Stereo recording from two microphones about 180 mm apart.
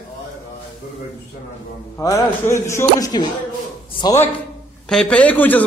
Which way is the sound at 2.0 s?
15° left (ahead or behind).